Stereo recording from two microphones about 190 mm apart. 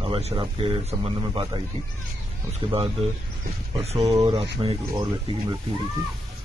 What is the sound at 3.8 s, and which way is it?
Speech, 20° right (ahead or behind).